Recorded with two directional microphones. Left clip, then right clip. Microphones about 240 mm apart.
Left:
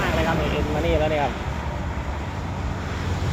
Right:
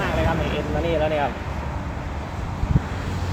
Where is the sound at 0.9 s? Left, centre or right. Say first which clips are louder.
Even; centre.